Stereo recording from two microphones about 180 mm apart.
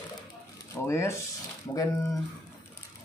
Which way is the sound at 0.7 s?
15° left (ahead or behind).